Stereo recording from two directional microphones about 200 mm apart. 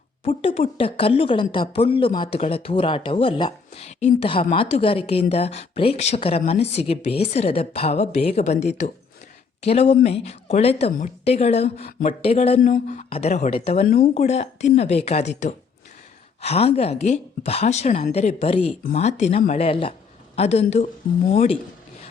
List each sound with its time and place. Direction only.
0.4 s a woman's voice: 30° left (ahead or behind)
11.9 s speech: 45° left (ahead or behind)
12.2 s a woman's voice: 30° left (ahead or behind)
12.6 s a woman's voice: 40° left (ahead or behind)
13.8 s speech: 45° left (ahead or behind)
14.1 s a woman's voice: 35° left (ahead or behind)